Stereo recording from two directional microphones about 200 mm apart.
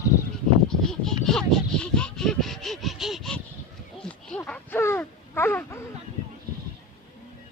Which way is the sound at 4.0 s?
5° left (ahead or behind).